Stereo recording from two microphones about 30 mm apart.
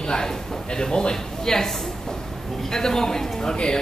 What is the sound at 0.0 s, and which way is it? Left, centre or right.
A woman's voice, left.